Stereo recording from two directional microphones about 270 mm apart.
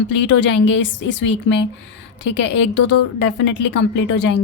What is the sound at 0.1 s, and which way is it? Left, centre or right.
A woman's voice, left.